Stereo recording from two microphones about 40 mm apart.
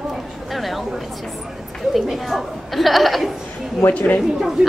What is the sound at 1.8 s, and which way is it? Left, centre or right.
Speech, centre.